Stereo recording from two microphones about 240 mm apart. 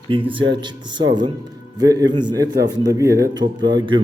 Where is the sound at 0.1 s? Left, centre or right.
Right.